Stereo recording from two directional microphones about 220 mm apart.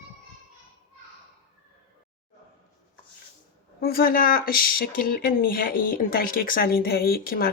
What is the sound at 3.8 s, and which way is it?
Speech, 45° left (ahead or behind).